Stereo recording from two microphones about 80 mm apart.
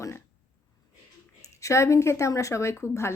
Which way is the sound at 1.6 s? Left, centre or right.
Left.